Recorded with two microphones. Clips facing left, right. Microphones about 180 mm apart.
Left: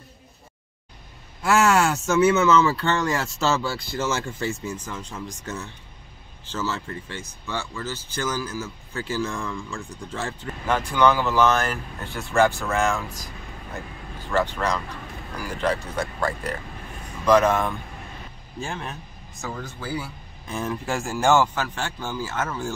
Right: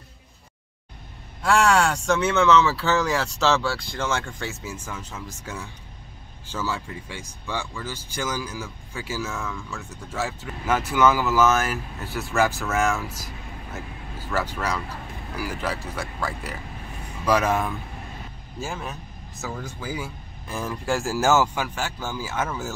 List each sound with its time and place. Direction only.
1.4 s speech: 5° left (ahead or behind)
14.3 s speech: 10° right (ahead or behind)
17.3 s speech: 10° right (ahead or behind)
20.4 s speech: centre (ahead or behind)